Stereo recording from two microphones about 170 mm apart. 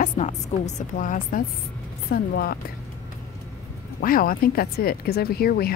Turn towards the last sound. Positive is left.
turn(degrees=65)  # may be behind; listen again after turning